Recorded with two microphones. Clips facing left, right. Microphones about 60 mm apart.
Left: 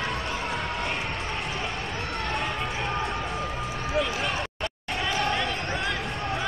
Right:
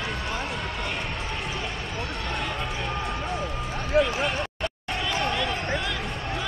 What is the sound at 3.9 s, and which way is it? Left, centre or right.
Run, right.